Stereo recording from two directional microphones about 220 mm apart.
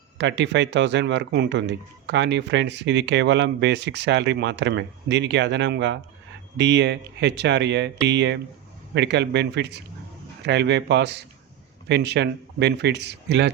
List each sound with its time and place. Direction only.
0.2 s speech: 55° right (ahead or behind)